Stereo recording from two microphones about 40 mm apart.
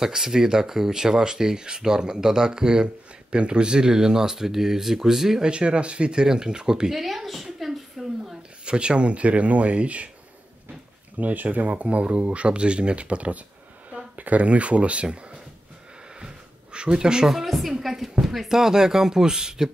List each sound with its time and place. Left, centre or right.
0.0 s speech: centre
5.4 s speech: right
6.9 s speech: centre
7.6 s a sound: centre
8.4 s speech: right
11.1 s speech: right
16.2 s a sound: right
17.3 s speech: centre